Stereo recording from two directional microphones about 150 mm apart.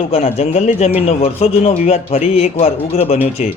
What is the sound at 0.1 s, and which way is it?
A man's voice, 40° left (ahead or behind).